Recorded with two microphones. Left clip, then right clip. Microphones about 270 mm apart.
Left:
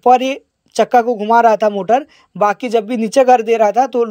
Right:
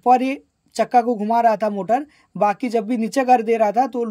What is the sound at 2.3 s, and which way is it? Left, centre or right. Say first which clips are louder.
Speech: left 5 dB; centre.